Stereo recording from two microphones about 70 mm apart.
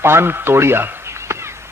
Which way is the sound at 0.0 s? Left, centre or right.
Right.